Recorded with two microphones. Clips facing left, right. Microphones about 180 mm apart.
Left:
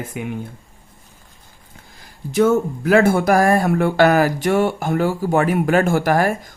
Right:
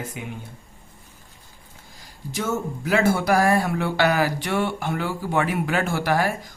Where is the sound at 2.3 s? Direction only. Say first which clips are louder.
Left 11 dB; 55° left (ahead or behind).